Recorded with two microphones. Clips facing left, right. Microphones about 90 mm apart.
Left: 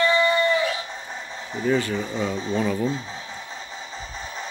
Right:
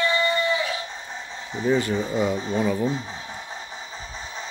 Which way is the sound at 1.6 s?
25° right (ahead or behind).